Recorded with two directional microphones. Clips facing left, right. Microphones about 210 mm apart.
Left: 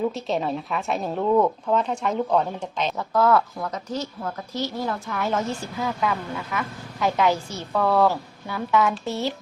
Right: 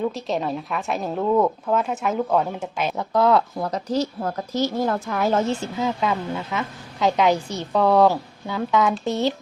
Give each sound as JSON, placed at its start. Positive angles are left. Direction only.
{"t": 0.1, "sound": "a woman's voice", "side_deg": 0}
{"t": 3.6, "sound": "a woman's voice", "side_deg": -35}
{"t": 5.5, "sound": "a woman's voice", "side_deg": -20}